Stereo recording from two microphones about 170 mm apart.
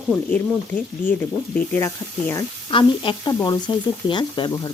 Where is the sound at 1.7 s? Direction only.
15° left (ahead or behind).